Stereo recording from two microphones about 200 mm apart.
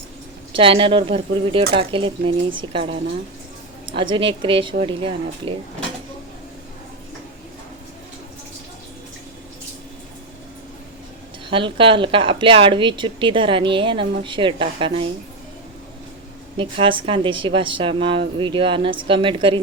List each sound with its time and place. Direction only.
0.5 s speech: 25° right (ahead or behind)
3.8 s speech: 25° right (ahead or behind)
11.4 s speech: 25° right (ahead or behind)
16.6 s speech: 25° right (ahead or behind)